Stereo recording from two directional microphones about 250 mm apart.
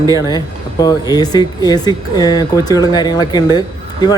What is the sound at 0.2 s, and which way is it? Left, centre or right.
Speech, centre.